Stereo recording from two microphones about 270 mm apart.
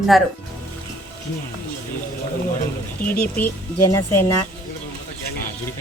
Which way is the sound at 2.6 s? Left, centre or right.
Left.